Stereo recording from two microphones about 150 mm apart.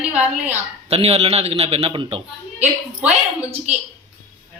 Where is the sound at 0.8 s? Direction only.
40° right (ahead or behind).